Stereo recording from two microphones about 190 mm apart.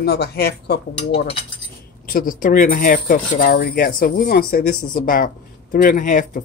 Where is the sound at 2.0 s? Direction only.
45° left (ahead or behind).